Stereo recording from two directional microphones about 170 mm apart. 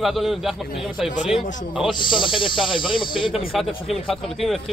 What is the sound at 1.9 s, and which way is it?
Speech, 30° left (ahead or behind).